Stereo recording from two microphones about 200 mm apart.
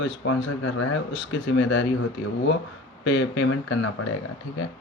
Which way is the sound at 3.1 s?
65° left (ahead or behind).